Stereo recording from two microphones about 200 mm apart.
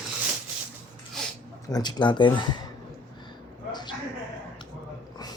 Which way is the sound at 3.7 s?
20° left (ahead or behind).